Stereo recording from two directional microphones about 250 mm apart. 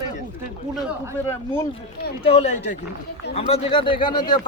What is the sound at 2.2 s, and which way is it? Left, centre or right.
Speech, left.